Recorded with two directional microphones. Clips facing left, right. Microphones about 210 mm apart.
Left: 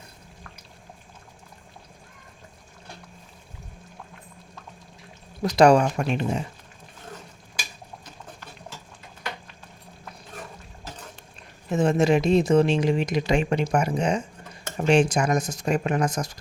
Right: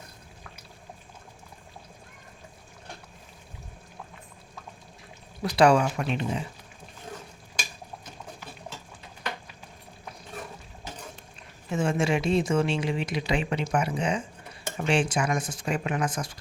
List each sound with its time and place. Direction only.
5.4 s speech: 40° left (ahead or behind)
11.7 s speech: 40° left (ahead or behind)